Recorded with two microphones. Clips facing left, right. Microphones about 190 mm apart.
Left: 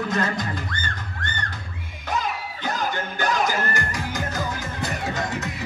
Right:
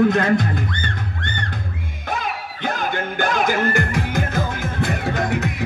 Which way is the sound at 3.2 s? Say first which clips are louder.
Right 4 dB; 55° right (ahead or behind).